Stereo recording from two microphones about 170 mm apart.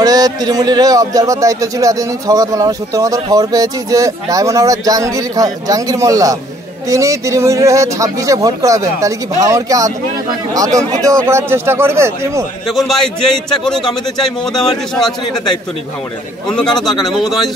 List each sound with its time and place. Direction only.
0.0 s a man's voice: 20° right (ahead or behind)
12.6 s a man's voice: centre (ahead or behind)
16.4 s a man's voice: 5° left (ahead or behind)